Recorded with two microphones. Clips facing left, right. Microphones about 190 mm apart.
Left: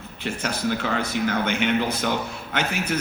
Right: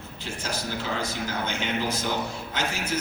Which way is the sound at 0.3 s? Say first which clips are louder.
Left 7 dB; 60° left (ahead or behind).